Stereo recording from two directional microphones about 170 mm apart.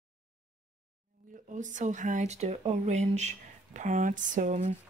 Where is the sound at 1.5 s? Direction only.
45° right (ahead or behind).